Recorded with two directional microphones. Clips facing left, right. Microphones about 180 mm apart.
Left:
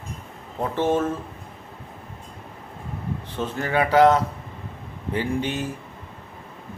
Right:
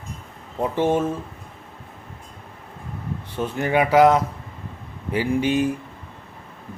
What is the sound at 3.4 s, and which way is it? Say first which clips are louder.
Speech: right 3 dB; 15° right (ahead or behind).